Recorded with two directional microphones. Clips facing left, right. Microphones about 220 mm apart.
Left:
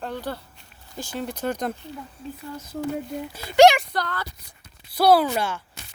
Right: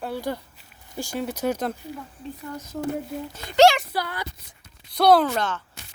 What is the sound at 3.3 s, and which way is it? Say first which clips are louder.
Speech: left 2 dB; 10° left (ahead or behind).